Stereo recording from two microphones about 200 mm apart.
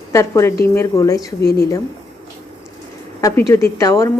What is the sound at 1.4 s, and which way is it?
Speech, 50° left (ahead or behind).